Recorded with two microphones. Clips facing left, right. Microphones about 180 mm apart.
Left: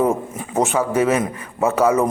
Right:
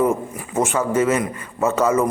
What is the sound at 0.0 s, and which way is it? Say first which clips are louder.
A man's voice: even; 20° left (ahead or behind).